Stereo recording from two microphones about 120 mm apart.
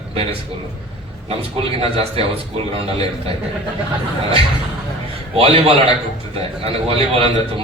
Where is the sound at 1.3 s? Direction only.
55° right (ahead or behind).